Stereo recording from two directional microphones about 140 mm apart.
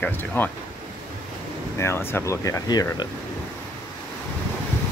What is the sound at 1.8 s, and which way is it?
Speech, 20° left (ahead or behind).